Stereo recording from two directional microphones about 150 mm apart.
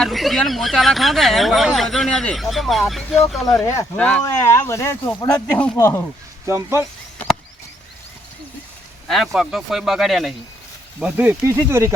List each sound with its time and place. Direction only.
0.0 s speech: centre (ahead or behind)
4.2 s speech: 20° left (ahead or behind)
5.7 s speech: 20° left (ahead or behind)
6.4 s speech: 20° right (ahead or behind)
9.0 s speech: centre (ahead or behind)
11.0 s speech: 10° right (ahead or behind)